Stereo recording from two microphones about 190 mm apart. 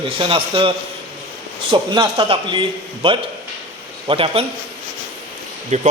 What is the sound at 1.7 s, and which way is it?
A man's voice, 25° right (ahead or behind).